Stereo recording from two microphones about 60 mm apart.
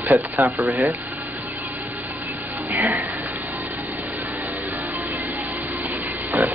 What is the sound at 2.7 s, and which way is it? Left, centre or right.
Music, right.